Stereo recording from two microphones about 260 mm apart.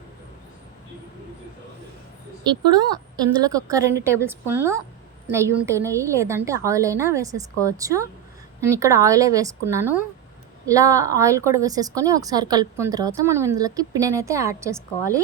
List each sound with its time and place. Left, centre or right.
2.7 s a woman's voice: centre